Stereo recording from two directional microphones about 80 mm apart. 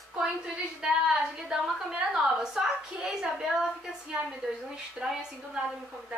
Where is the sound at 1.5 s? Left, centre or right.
Centre.